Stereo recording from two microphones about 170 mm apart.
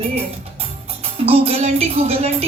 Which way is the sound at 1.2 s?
35° right (ahead or behind).